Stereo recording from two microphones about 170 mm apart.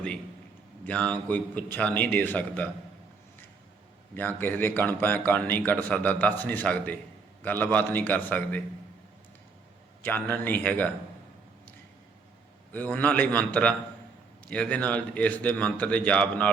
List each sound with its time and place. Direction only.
0.9 s a man's voice: 5° left (ahead or behind)
4.1 s a man's voice: 10° left (ahead or behind)
10.0 s a man's voice: 10° left (ahead or behind)
12.7 s a man's voice: 10° left (ahead or behind)